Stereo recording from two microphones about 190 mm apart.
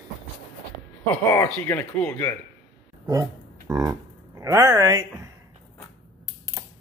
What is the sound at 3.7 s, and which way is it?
Speech, 15° right (ahead or behind).